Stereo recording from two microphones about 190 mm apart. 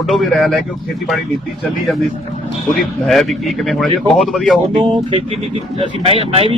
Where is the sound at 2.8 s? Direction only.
Centre (ahead or behind).